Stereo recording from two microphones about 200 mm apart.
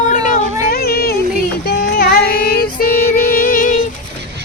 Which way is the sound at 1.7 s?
55° left (ahead or behind).